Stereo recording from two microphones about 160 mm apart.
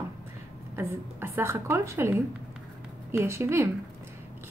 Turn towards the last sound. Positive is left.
turn(degrees=-15)  # may be behind; listen again after turning